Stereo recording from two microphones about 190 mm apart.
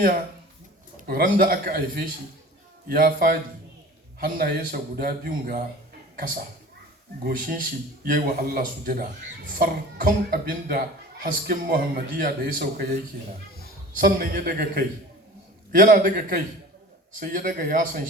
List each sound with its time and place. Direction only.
0.9 s speech: 50° right (ahead or behind)
7.3 s speech: 50° right (ahead or behind)
14.0 s speech: 50° right (ahead or behind)